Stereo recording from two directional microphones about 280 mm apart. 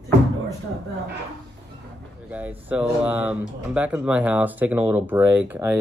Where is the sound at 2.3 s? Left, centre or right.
Centre.